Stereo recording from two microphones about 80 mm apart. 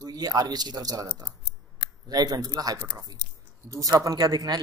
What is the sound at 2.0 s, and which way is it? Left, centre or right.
Speech, right.